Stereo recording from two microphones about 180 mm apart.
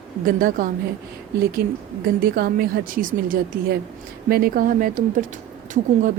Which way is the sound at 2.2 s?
55° right (ahead or behind).